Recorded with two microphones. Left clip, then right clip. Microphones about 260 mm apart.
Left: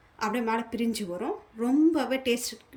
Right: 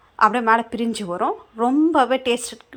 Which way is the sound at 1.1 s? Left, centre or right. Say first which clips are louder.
Right 10 dB; right.